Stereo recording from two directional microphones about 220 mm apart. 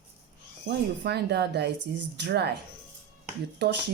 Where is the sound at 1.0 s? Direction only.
50° right (ahead or behind).